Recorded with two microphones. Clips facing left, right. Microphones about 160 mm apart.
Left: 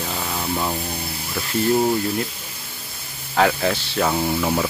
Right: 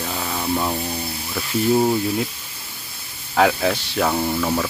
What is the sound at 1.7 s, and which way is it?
Speech, 5° right (ahead or behind).